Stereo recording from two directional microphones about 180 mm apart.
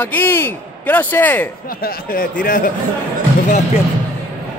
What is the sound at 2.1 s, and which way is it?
Speech, 50° left (ahead or behind).